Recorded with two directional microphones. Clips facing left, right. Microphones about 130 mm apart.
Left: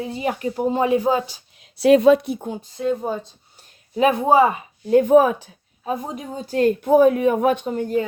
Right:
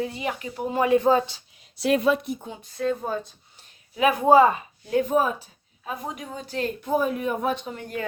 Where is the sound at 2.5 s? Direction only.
55° left (ahead or behind).